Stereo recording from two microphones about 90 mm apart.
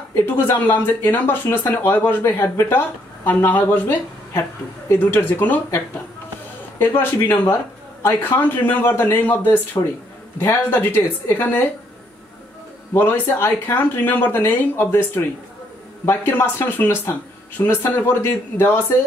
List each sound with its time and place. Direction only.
0.1 s speech: 25° left (ahead or behind)
4.3 s a woman's voice: 30° left (ahead or behind)
5.0 s speech: 15° left (ahead or behind)
6.8 s speech: 20° left (ahead or behind)
12.9 s speech: 25° left (ahead or behind)